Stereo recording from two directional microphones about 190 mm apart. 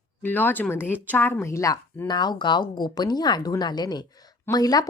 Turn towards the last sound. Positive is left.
turn(degrees=20)  # may be behind; listen again after turning